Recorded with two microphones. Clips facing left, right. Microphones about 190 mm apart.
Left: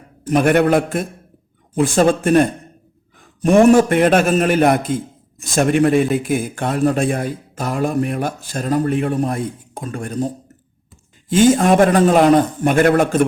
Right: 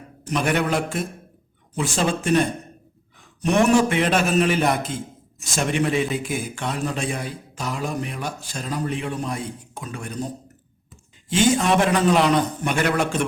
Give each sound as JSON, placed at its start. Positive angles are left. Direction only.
{"t": 0.3, "sound": "a man's voice", "side_deg": 50}